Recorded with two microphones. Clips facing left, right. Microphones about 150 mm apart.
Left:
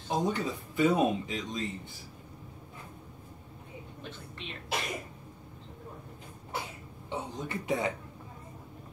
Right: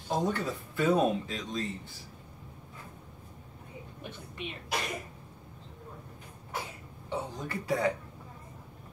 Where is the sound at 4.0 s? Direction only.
10° right (ahead or behind).